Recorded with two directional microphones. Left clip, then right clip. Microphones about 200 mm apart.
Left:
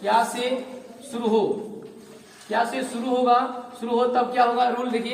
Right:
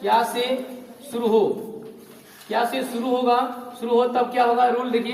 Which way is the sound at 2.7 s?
15° left (ahead or behind).